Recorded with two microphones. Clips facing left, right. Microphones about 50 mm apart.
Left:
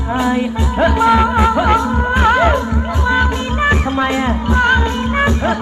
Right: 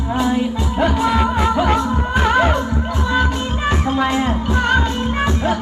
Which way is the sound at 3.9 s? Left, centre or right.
Left.